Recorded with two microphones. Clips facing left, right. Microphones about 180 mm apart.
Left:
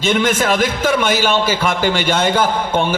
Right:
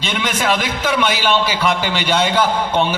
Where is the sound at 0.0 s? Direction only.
45° left (ahead or behind).